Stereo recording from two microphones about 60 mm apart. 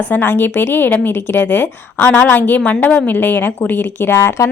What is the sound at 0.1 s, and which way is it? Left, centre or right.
A woman's voice, left.